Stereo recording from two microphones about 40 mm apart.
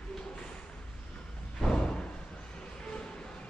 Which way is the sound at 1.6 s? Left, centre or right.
Left.